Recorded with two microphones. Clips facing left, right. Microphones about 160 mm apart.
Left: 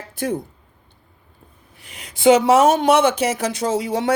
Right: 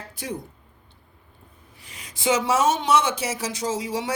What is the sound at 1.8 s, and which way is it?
Speech, 65° left (ahead or behind).